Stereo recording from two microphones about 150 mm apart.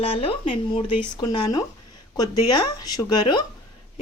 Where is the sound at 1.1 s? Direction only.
30° left (ahead or behind).